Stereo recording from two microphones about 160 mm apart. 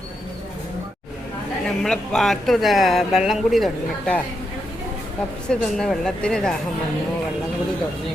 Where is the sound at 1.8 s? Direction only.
5° left (ahead or behind).